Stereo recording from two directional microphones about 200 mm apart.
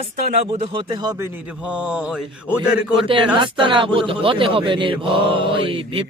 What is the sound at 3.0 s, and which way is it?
Speech, 25° right (ahead or behind).